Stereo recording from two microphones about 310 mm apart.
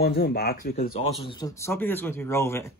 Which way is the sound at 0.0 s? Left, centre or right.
Left.